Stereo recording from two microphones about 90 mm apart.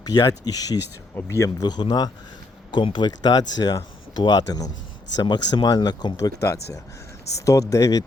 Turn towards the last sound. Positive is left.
turn(degrees=40)  # may be behind; listen again after turning